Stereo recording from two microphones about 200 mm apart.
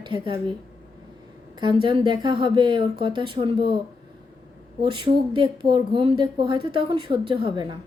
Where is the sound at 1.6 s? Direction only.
25° right (ahead or behind).